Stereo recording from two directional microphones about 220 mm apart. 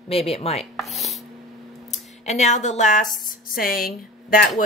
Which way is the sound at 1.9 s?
30° left (ahead or behind).